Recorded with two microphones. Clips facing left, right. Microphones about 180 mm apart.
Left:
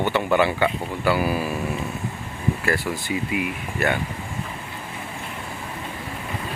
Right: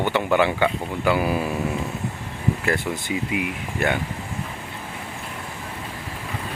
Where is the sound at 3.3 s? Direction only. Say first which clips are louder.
Even; 15° right (ahead or behind).